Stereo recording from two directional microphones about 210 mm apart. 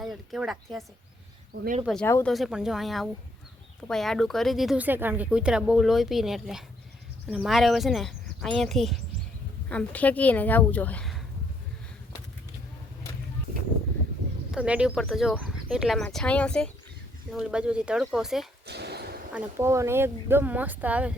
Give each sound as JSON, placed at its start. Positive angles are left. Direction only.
{"t": 0.0, "sound": "speech", "side_deg": 0}
{"t": 2.3, "sound": "speech", "side_deg": 0}
{"t": 14.5, "sound": "speech", "side_deg": -5}
{"t": 18.6, "sound": "a sound", "side_deg": -50}
{"t": 19.3, "sound": "speech", "side_deg": -10}